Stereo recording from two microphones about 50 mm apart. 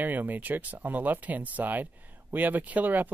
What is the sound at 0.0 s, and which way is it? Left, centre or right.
Speech, right.